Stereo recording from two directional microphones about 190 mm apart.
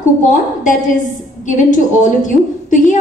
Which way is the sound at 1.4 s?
40° left (ahead or behind).